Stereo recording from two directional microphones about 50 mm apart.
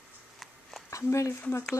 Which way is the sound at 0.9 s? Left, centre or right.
Left.